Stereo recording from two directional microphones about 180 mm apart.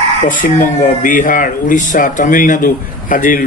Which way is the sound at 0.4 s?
50° left (ahead or behind).